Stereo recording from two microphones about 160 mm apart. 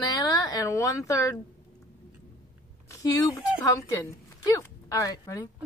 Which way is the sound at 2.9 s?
20° left (ahead or behind).